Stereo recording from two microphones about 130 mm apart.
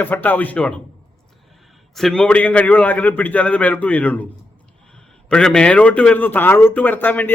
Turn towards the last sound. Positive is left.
turn(degrees=15)  # may be behind; listen again after turning